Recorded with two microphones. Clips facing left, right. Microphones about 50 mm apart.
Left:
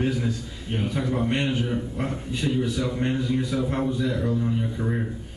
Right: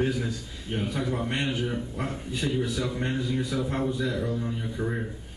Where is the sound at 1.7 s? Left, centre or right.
Centre.